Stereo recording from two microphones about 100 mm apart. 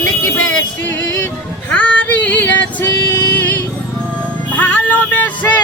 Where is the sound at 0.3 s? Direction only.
15° left (ahead or behind).